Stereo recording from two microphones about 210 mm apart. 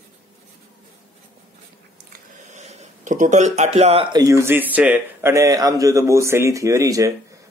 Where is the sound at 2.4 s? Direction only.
35° right (ahead or behind).